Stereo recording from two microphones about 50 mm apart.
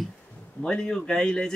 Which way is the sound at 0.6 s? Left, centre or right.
Centre.